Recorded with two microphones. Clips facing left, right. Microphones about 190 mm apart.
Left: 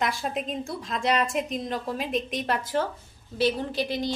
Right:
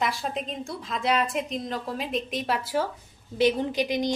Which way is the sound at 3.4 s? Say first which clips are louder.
Right 2 dB; 15° right (ahead or behind).